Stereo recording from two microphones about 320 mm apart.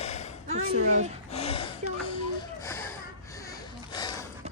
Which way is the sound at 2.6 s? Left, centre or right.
Centre.